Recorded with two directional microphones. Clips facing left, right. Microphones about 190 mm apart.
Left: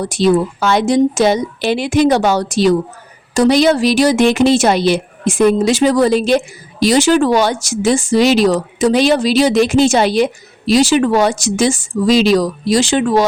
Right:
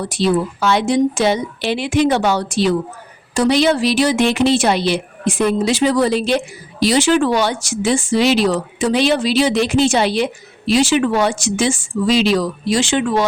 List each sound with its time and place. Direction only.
0.0 s a woman's voice: 45° left (ahead or behind)